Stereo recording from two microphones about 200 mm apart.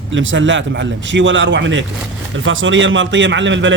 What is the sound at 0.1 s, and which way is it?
A man's voice, 70° right (ahead or behind).